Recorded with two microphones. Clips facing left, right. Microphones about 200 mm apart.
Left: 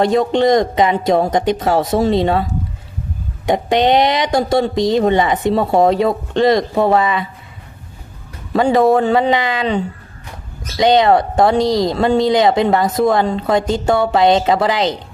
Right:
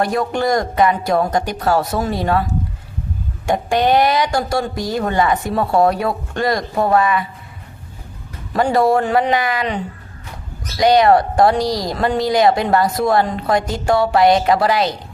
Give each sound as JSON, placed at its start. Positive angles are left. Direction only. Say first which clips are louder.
{"t": 0.0, "sound": "speech", "louder": "left 5 dB", "side_deg": 20}
{"t": 3.4, "sound": "speech", "louder": "left 2 dB", "side_deg": 20}
{"t": 8.5, "sound": "speech", "louder": "left 3 dB", "side_deg": 25}